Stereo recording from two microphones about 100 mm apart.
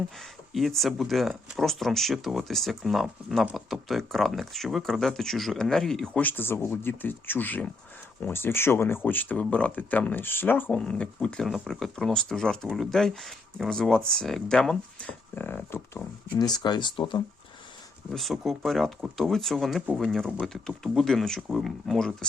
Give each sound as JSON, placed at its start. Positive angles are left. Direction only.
{"t": 0.5, "sound": "speech", "side_deg": 0}
{"t": 6.1, "sound": "speech", "side_deg": 20}
{"t": 15.4, "sound": "speech", "side_deg": 20}
{"t": 16.3, "sound": "speech", "side_deg": 45}
{"t": 18.1, "sound": "speech", "side_deg": 0}